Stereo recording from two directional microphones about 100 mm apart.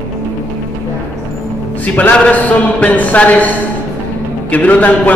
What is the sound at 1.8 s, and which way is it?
Speech, 15° left (ahead or behind).